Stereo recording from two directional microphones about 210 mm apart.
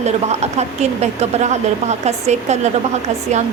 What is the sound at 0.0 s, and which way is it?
A woman's voice, 30° right (ahead or behind).